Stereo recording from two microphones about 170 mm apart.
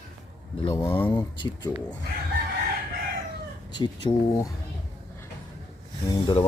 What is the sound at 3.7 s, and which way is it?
Speech, 25° left (ahead or behind).